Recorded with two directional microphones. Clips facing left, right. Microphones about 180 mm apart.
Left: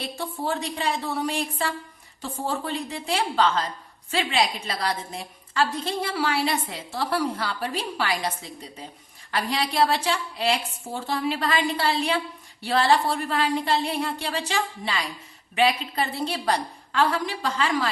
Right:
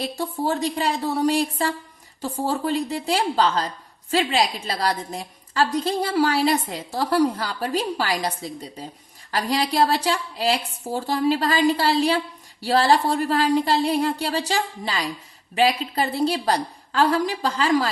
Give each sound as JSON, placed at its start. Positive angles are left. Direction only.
{"t": 0.2, "sound": "a woman's voice", "side_deg": -35}